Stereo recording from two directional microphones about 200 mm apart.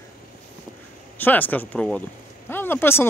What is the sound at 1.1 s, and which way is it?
Speech, 10° left (ahead or behind).